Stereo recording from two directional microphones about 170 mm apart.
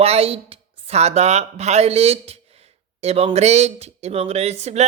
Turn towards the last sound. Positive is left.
turn(degrees=-40)  # may be behind; listen again after turning